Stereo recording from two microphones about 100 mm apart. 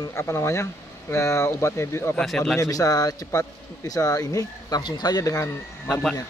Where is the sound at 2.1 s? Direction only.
5° left (ahead or behind).